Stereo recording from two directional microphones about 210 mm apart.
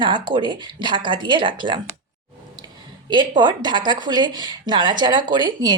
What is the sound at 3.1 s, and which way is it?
Speech, 20° right (ahead or behind).